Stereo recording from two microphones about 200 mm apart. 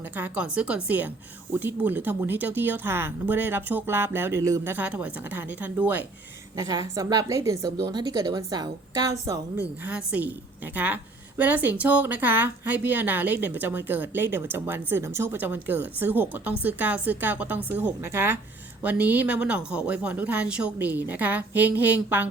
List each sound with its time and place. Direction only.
0.2 s speech: 5° right (ahead or behind)
6.6 s a woman's voice: 20° right (ahead or behind)